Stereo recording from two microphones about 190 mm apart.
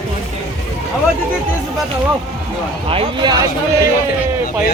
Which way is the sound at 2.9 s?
25° right (ahead or behind).